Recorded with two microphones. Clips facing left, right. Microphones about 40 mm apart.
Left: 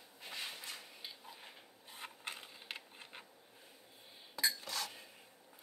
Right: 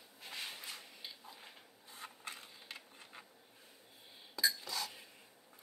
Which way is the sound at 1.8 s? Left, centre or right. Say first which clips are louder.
Left 2 dB; left.